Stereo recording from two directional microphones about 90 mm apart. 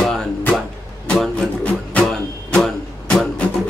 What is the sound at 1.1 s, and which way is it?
Music, 10° left (ahead or behind).